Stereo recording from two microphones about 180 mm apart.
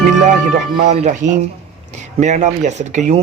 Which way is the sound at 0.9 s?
40° right (ahead or behind).